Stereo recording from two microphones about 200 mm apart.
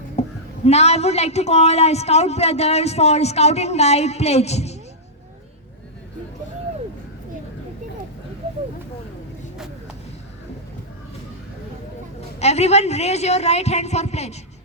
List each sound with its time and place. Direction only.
0.2 s a woman's voice: 30° left (ahead or behind)
12.4 s a woman's voice: 35° left (ahead or behind)